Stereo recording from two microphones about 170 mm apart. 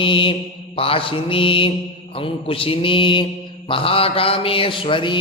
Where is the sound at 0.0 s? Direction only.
30° left (ahead or behind).